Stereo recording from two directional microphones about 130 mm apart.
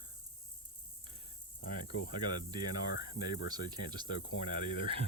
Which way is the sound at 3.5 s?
35° right (ahead or behind).